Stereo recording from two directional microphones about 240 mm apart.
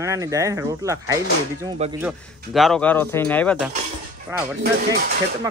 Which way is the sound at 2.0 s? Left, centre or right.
Centre.